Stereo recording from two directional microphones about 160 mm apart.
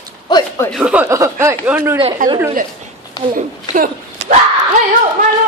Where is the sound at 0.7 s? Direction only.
5° right (ahead or behind).